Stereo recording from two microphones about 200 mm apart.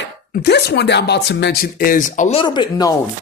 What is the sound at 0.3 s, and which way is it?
Speech, 55° left (ahead or behind).